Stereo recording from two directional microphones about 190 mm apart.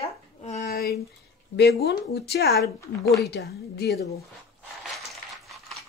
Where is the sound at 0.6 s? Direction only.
55° left (ahead or behind).